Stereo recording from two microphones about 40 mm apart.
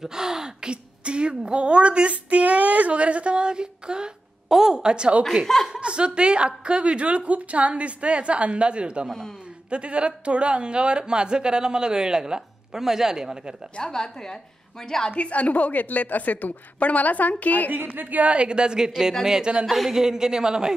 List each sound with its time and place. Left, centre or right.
0.0 s speech: centre
4.5 s a sound: centre
5.8 s speech: right
13.7 s a woman's voice: centre
15.0 s a woman's voice: left
17.9 s a woman's voice: right; by 19.5 s centre
19.6 s a woman's voice: centre